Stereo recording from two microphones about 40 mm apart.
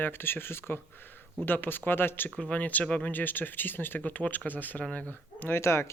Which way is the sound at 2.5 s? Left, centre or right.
Left.